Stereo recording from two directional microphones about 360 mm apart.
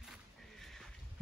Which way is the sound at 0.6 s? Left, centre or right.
Centre.